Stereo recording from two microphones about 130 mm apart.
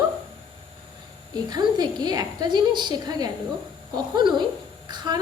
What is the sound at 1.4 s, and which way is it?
Speech, 30° right (ahead or behind).